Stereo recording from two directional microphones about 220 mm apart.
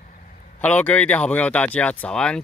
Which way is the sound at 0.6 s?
5° left (ahead or behind).